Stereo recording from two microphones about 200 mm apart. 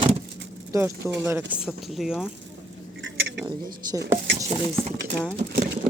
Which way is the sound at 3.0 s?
65° right (ahead or behind).